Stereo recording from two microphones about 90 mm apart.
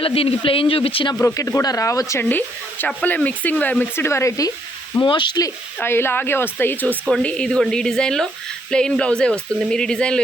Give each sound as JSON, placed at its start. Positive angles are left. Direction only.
{"t": 0.0, "sound": "speech", "side_deg": 90}
{"t": 1.2, "sound": "speech", "side_deg": 35}
{"t": 2.3, "sound": "speech", "side_deg": 20}
{"t": 5.0, "sound": "speech", "side_deg": 65}
{"t": 5.8, "sound": "speech", "side_deg": 25}